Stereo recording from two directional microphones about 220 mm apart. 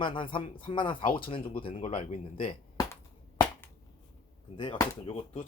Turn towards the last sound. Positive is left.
turn(degrees=25)  # may be behind; listen again after turning